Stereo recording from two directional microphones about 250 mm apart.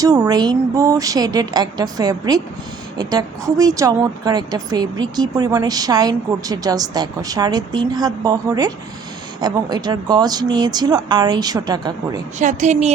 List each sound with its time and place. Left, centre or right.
0.0 s a woman's voice: centre
12.4 s a woman's voice: right